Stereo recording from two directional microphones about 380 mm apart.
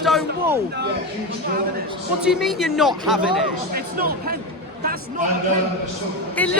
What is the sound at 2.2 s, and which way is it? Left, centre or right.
Speech, centre.